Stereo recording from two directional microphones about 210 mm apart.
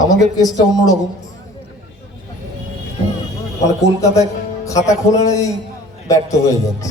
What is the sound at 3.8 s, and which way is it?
A man's voice, 15° left (ahead or behind).